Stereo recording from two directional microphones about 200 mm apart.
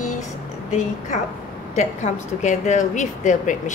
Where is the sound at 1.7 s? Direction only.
35° left (ahead or behind).